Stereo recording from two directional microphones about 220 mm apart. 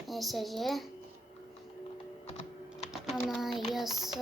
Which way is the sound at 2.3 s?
30° left (ahead or behind).